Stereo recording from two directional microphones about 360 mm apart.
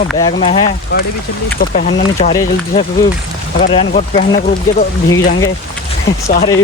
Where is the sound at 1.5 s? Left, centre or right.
Left.